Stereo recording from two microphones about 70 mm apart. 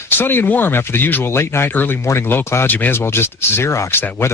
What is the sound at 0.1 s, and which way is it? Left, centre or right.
Speech, left.